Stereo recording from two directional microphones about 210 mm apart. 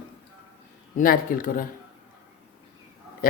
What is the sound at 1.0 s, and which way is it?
Speech, 40° left (ahead or behind).